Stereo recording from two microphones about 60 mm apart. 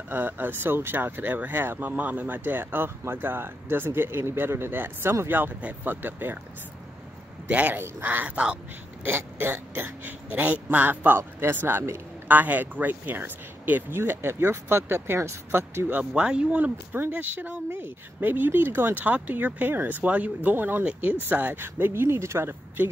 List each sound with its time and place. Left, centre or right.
0.1 s speech: right
7.4 s speech: right
16.1 s speech: centre
16.9 s speech: right